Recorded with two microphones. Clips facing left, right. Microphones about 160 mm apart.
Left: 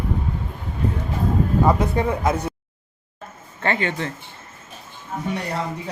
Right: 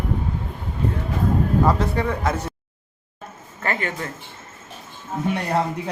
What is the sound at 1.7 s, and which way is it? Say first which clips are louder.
Speech: left 2 dB; 15° left (ahead or behind).